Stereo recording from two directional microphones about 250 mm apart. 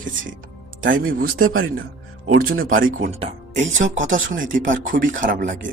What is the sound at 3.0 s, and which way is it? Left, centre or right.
Speech, right.